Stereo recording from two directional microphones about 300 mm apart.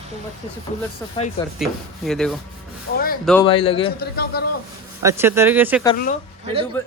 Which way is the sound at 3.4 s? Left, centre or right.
Centre.